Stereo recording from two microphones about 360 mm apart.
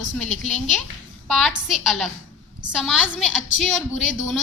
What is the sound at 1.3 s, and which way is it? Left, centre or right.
A woman's voice, centre.